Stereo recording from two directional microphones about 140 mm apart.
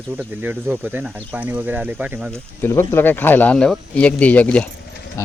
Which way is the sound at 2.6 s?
15° left (ahead or behind).